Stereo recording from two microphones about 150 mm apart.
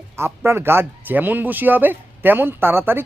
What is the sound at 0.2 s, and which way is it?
Speech, 15° right (ahead or behind).